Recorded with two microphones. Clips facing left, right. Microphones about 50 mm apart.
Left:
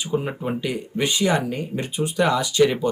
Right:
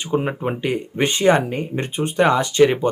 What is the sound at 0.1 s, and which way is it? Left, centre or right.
Speech, right.